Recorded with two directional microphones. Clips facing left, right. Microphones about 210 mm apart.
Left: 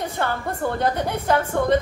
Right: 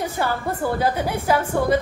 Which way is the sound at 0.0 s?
5° right (ahead or behind).